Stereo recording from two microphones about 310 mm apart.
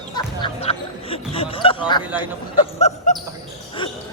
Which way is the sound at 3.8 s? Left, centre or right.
Centre.